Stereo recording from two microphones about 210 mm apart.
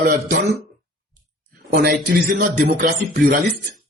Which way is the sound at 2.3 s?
40° right (ahead or behind).